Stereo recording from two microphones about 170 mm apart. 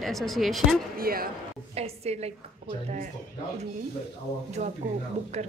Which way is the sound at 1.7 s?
40° right (ahead or behind).